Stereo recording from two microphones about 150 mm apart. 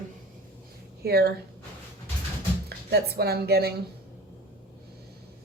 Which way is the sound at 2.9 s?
90° right.